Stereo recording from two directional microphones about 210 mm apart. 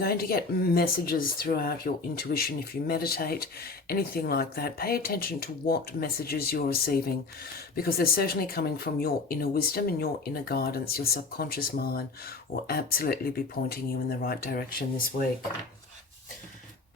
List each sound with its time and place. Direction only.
0.0 s speech: 45° left (ahead or behind)